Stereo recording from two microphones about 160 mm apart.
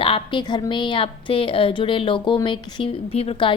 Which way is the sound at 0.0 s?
30° left (ahead or behind).